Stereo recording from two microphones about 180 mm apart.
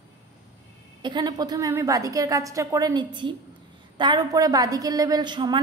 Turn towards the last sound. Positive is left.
turn(degrees=-25)  # may be behind; listen again after turning